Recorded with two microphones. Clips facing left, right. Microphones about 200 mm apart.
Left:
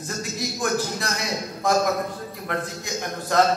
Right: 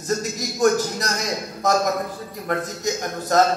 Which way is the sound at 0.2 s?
40° right (ahead or behind).